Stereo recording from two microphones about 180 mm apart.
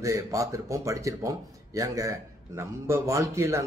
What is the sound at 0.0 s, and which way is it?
Speech, 15° right (ahead or behind).